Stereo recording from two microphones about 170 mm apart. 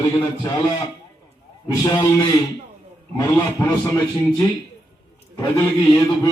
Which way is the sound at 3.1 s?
20° left (ahead or behind).